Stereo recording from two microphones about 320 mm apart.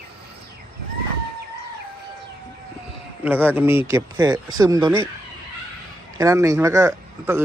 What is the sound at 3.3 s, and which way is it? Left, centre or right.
A man's voice, centre.